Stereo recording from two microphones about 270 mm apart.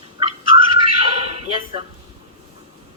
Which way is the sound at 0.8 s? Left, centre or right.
Right.